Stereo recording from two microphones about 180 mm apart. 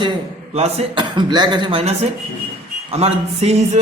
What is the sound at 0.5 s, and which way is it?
A man's voice, 35° right (ahead or behind).